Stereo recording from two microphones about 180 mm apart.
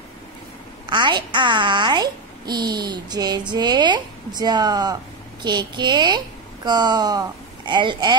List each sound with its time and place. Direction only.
0.8 s a child's voice: 25° right (ahead or behind)